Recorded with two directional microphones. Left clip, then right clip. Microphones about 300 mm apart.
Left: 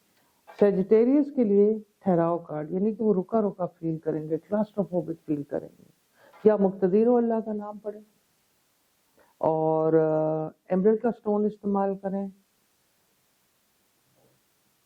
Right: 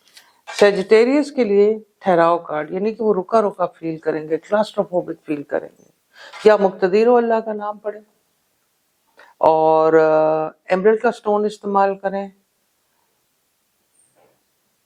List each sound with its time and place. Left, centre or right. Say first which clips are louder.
0.1 s speech: right 17 dB; centre
4.9 s speech: right 8 dB; right
5.2 s speech: right 8 dB; centre
9.1 s speech: right 11 dB; centre